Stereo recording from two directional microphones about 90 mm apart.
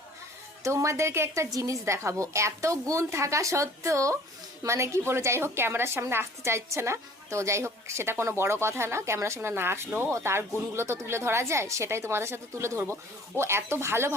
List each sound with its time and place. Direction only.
0.6 s a woman's voice: 35° right (ahead or behind)